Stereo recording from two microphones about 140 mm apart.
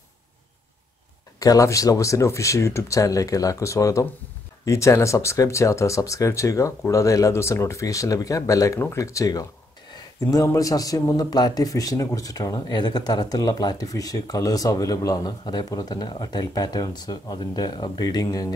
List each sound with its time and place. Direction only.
1.4 s a man's voice: 25° left (ahead or behind)